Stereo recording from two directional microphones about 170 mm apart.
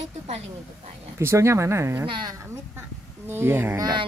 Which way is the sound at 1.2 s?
15° right (ahead or behind).